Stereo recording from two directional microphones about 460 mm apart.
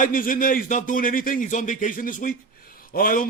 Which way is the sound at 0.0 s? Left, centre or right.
Centre.